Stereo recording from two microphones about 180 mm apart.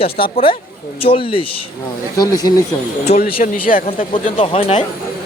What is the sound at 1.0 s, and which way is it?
Speech, 30° left (ahead or behind).